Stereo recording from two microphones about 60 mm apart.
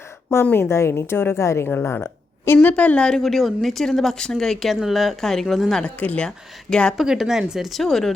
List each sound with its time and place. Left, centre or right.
0.5 s a woman's voice: left
1.6 s speech: left
2.0 s a sound: left
2.6 s speech: left
3.2 s speech: centre
5.8 s speech: left
6.9 s speech: centre